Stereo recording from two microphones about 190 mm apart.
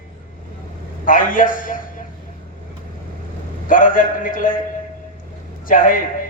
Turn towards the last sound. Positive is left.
turn(degrees=45)  # may be behind; listen again after turning